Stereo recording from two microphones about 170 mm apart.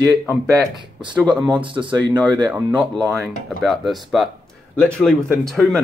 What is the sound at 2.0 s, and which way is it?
Speech, 10° left (ahead or behind).